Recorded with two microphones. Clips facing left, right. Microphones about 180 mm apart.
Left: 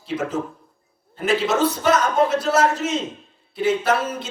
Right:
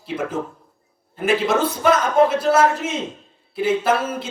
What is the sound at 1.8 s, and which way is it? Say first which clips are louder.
Speech: right 2 dB; 55° right (ahead or behind).